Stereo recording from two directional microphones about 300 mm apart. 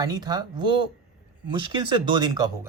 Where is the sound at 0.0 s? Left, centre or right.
Centre.